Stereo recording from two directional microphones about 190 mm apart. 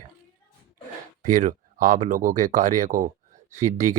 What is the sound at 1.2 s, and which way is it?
Speech, 40° right (ahead or behind).